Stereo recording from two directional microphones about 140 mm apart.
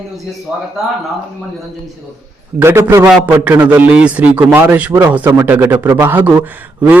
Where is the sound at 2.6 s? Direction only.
15° right (ahead or behind).